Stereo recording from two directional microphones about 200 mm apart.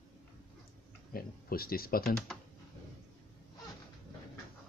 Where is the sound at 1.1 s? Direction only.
50° left (ahead or behind).